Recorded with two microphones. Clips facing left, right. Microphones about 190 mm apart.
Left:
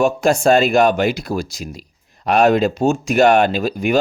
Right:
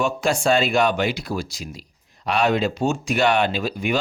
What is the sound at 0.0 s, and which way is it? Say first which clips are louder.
Speech: left 6 dB; 45° left (ahead or behind).